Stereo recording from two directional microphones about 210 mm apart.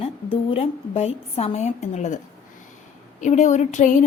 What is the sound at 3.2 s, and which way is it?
Speech, 35° left (ahead or behind).